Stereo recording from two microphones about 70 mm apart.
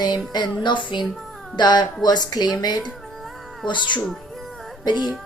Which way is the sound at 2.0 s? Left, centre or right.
Left.